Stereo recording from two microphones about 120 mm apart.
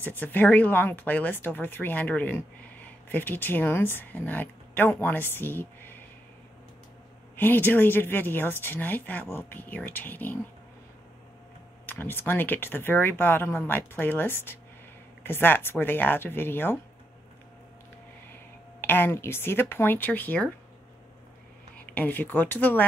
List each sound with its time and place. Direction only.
0.0 s speech: 15° left (ahead or behind)
7.3 s speech: 15° left (ahead or behind)
11.8 s speech: 15° left (ahead or behind)
18.8 s speech: 20° left (ahead or behind)
21.7 s speech: 15° left (ahead or behind)